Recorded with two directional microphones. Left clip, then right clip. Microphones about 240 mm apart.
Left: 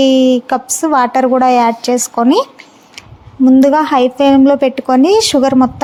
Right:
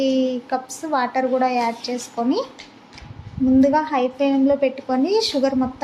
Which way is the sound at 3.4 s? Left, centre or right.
Left.